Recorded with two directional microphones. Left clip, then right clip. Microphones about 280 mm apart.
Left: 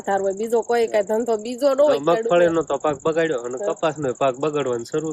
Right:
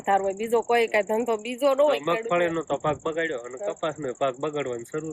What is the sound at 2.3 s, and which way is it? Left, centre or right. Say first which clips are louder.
Speech: left 7 dB; left.